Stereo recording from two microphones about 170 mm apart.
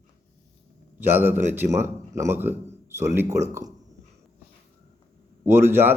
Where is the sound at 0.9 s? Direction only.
10° right (ahead or behind).